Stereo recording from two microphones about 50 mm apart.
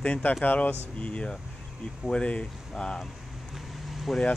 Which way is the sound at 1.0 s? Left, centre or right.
Left.